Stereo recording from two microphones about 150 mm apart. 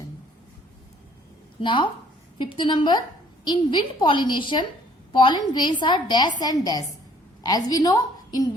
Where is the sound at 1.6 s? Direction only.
35° left (ahead or behind).